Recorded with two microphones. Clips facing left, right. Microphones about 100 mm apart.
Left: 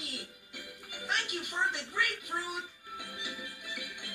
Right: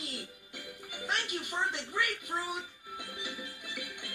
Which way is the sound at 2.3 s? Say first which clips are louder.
Right 1 dB; 15° right (ahead or behind).